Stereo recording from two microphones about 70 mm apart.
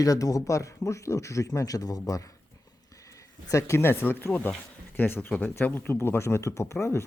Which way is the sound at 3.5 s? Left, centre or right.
Left.